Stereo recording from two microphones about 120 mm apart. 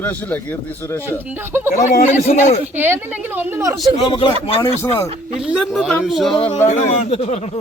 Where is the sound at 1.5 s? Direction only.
20° right (ahead or behind).